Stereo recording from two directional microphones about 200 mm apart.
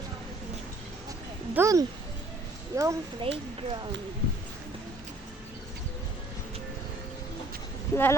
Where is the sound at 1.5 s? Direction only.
15° right (ahead or behind).